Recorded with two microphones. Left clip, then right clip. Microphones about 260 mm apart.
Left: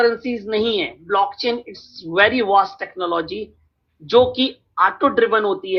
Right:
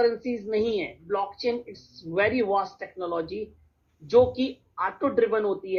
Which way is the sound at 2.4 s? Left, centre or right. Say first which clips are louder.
Left 9 dB; left.